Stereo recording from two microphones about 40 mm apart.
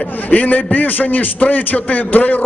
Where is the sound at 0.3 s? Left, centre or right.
Left.